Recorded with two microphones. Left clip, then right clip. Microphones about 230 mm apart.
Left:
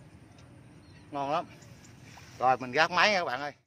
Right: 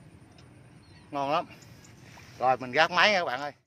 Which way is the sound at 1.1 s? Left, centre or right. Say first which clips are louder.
Right 3 dB; right.